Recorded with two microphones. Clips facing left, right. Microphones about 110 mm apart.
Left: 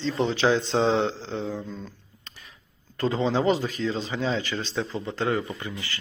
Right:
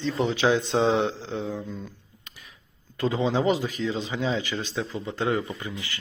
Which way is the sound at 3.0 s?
10° right (ahead or behind).